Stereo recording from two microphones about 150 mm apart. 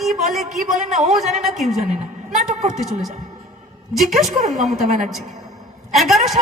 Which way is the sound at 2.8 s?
Centre (ahead or behind).